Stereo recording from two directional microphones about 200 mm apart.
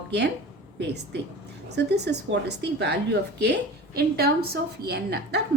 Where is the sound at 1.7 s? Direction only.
55° right (ahead or behind).